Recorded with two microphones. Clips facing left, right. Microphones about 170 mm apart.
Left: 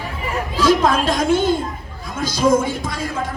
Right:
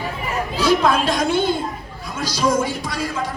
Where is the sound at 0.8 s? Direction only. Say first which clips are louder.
Left 1 dB; 45° left (ahead or behind).